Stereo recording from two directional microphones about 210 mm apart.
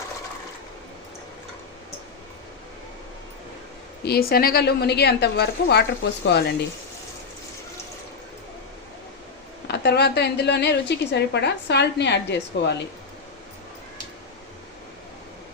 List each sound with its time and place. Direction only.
4.0 s a woman's voice: 45° left (ahead or behind)
9.6 s a woman's voice: 50° left (ahead or behind)